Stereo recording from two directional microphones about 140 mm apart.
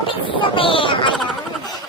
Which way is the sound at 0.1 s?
40° left (ahead or behind).